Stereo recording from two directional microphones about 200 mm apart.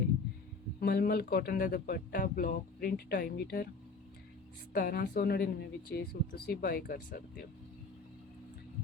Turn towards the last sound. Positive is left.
turn(degrees=45)  # may be behind; listen again after turning